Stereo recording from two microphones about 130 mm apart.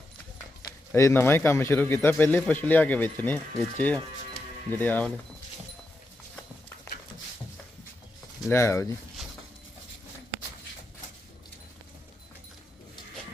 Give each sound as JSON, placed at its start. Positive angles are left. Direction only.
{"t": 0.9, "sound": "a man's voice", "side_deg": 20}
{"t": 8.4, "sound": "speech", "side_deg": 20}